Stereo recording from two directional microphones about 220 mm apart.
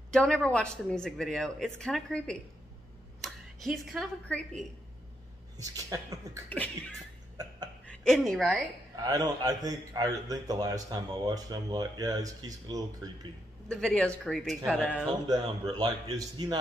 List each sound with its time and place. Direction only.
0.1 s speech: 5° left (ahead or behind)
5.6 s a man's voice: 15° right (ahead or behind)
7.8 s speech: 5° left (ahead or behind)
8.9 s a man's voice: 15° right (ahead or behind)
13.7 s a man's voice: 5° left (ahead or behind)
15.2 s a man's voice: 15° right (ahead or behind)